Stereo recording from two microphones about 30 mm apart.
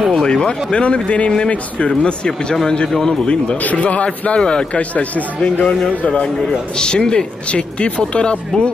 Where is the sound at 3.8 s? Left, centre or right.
Left.